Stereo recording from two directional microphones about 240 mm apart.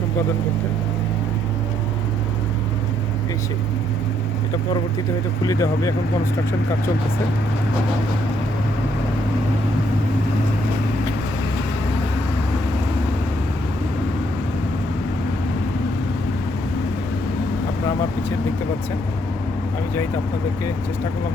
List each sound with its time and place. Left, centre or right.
5.4 s speech: centre